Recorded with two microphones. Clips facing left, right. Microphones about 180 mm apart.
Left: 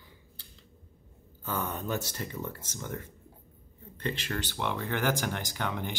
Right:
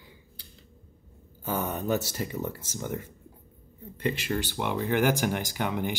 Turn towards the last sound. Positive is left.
turn(degrees=-15)  # may be behind; listen again after turning